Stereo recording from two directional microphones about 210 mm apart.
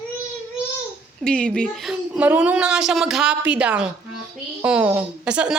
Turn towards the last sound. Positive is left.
turn(degrees=-5)  # may be behind; listen again after turning